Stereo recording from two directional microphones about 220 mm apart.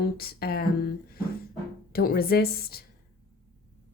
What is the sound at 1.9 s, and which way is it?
Speech, 45° left (ahead or behind).